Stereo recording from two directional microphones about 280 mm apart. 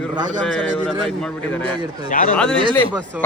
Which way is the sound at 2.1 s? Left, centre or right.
Left.